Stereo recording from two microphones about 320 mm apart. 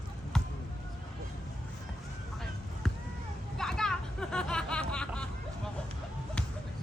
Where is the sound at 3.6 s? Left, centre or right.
Centre.